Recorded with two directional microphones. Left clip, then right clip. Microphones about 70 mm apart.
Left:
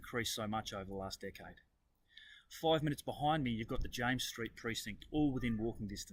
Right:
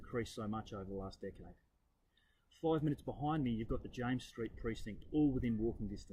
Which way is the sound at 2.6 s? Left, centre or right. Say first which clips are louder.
Left 3 dB; left.